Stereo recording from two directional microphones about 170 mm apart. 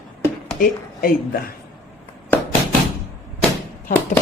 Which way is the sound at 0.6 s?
60° left (ahead or behind).